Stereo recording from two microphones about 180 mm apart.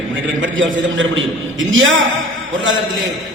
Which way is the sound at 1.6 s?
90° right.